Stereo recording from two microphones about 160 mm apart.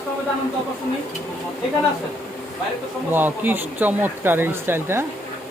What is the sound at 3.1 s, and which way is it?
Speech, 10° right (ahead or behind).